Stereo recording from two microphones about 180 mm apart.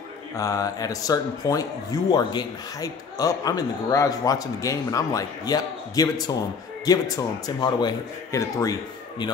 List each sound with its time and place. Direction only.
0.4 s speech: 20° left (ahead or behind)